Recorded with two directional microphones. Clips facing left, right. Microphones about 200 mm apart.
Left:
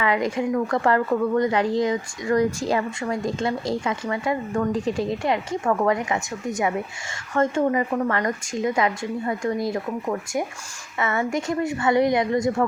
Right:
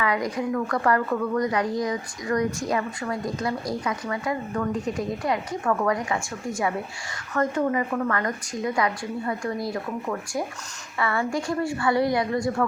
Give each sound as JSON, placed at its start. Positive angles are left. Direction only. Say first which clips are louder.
{"t": 0.0, "sound": "a woman's voice", "louder": "left 3 dB", "side_deg": 25}